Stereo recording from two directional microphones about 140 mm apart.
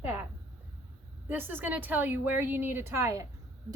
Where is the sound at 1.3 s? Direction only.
15° right (ahead or behind).